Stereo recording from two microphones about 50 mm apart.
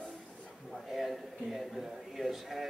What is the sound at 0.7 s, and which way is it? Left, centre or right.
Speech, centre.